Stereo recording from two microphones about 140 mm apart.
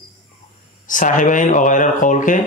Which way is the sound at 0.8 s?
70° left (ahead or behind).